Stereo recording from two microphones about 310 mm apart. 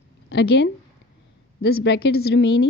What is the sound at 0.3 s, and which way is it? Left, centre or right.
A woman's voice, left.